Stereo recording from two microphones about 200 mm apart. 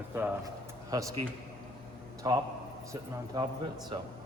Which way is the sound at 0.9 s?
20° right (ahead or behind).